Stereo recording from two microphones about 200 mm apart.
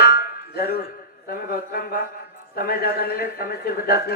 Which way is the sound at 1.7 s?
45° left (ahead or behind).